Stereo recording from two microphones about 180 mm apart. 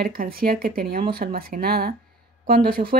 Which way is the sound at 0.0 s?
55° right (ahead or behind).